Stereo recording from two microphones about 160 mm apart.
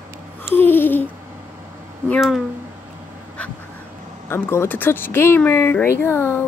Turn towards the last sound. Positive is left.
turn(degrees=15)  # may be behind; listen again after turning